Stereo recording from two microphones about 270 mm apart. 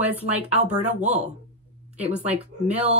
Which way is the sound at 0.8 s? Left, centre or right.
Right.